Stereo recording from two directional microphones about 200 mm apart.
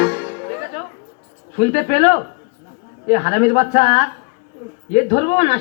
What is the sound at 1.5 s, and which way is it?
Speech, 50° left (ahead or behind).